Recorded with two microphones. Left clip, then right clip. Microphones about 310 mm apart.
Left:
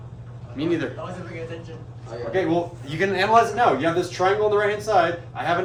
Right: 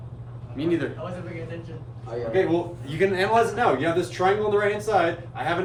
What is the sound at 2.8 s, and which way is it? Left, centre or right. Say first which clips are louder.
Speech: left 1 dB; left.